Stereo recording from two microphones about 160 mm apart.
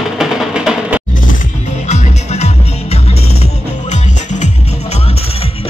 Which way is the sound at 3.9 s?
50° left (ahead or behind).